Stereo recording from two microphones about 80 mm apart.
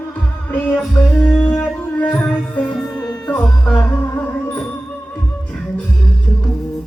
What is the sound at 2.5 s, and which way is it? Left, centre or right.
Music, centre.